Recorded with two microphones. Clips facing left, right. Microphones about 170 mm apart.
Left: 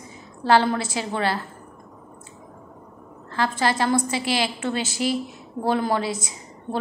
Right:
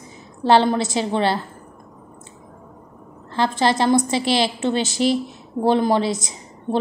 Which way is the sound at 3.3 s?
25° right (ahead or behind).